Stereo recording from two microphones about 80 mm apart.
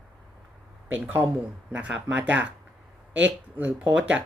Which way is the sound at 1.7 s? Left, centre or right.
Centre.